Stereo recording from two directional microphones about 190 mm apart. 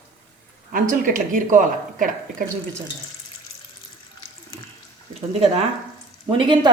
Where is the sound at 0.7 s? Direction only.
45° right (ahead or behind).